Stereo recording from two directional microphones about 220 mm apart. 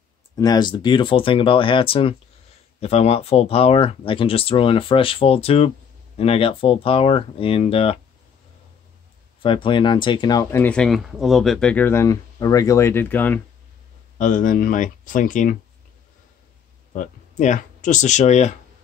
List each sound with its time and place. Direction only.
0.4 s speech: 20° left (ahead or behind)
9.4 s speech: 25° left (ahead or behind)
14.1 s speech: 35° left (ahead or behind)
16.9 s speech: 35° left (ahead or behind)